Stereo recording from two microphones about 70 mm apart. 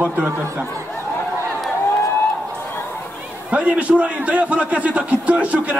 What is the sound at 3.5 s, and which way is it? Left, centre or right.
A man's voice, centre.